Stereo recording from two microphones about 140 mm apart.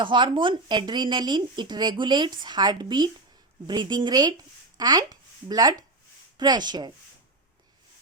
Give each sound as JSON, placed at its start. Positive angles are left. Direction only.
{"t": 0.0, "sound": "speech", "side_deg": -35}